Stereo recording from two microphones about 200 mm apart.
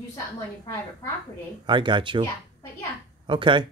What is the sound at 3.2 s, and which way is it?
Speech, 25° right (ahead or behind).